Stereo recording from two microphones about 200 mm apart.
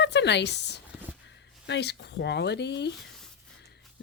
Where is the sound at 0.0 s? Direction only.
60° left (ahead or behind).